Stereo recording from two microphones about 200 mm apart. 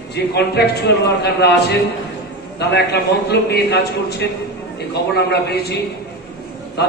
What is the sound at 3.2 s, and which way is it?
A man's voice, 55° left (ahead or behind).